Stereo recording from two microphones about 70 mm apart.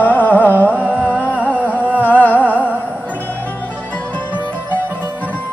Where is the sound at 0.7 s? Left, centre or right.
Right.